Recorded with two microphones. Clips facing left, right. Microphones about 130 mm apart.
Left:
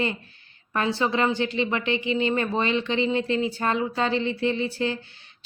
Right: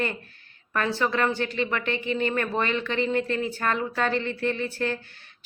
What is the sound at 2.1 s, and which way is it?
A woman's voice, 15° left (ahead or behind).